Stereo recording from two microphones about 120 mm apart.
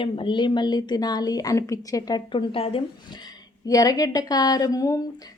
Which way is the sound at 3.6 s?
30° left (ahead or behind).